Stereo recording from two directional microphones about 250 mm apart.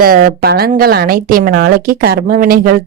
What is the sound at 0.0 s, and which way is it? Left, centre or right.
Speech, right.